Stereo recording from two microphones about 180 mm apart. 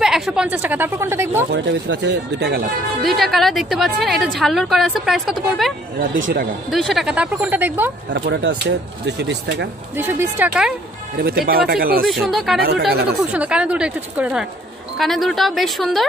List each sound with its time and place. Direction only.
0.0 s a woman's voice: 5° right (ahead or behind)
1.5 s speech: 75° right (ahead or behind)
3.0 s a woman's voice: centre (ahead or behind)
6.1 s speech: 90° right
6.7 s a woman's voice: centre (ahead or behind)
8.1 s speech: 75° right (ahead or behind)
9.9 s a woman's voice: 10° right (ahead or behind)
11.2 s speech: 55° right (ahead or behind)
12.1 s a woman's voice: centre (ahead or behind)
12.9 s speech: 60° right (ahead or behind)
13.3 s a woman's voice: 5° right (ahead or behind)